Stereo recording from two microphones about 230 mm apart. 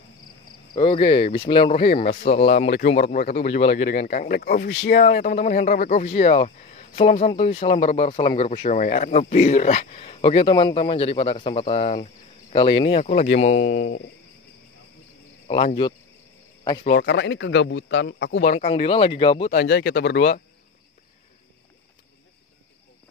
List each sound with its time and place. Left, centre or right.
0.7 s speech: left
1.7 s speech: left
2.2 s speech: left
3.0 s speech: left
15.4 s speech: left
16.9 s a man's voice: left
18.5 s speech: left
19.5 s a man's voice: left